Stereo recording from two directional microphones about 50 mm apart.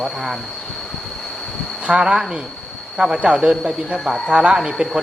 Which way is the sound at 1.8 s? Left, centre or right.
Centre.